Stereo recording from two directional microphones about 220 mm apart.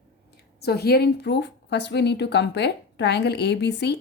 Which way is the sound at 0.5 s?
45° left (ahead or behind).